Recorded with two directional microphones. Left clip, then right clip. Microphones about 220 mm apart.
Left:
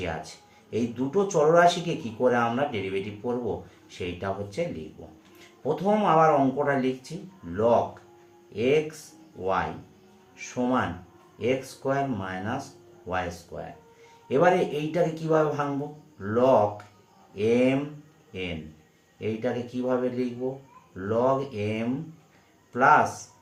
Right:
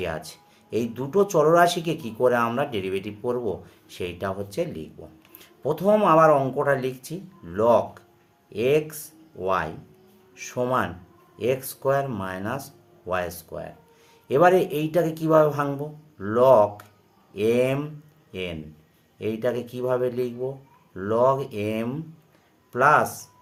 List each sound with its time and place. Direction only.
0.0 s a man's voice: 55° right (ahead or behind)
5.6 s a man's voice: 55° right (ahead or behind)
19.2 s a man's voice: 55° right (ahead or behind)